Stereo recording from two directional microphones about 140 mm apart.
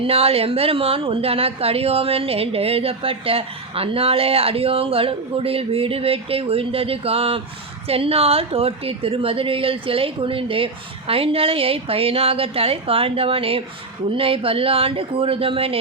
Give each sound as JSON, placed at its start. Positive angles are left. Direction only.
{"t": 0.0, "sound": "a woman's voice", "side_deg": -45}